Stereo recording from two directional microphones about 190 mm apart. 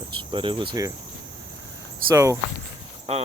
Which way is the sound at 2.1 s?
15° right (ahead or behind).